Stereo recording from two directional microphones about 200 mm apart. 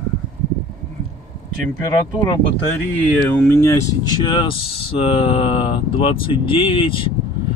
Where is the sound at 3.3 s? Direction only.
10° left (ahead or behind).